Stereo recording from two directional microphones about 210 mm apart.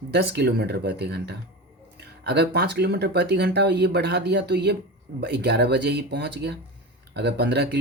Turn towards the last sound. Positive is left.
turn(degrees=-50)  # may be behind; listen again after turning